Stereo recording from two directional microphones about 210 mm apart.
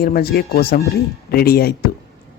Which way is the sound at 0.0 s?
45° left (ahead or behind).